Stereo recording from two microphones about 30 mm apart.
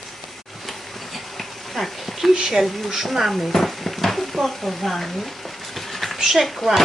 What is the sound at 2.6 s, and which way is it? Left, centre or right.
Speech, centre.